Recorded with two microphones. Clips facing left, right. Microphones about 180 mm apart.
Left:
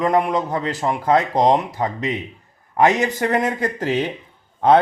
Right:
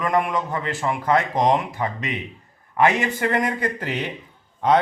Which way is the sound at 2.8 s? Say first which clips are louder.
Left 3 dB; 40° left (ahead or behind).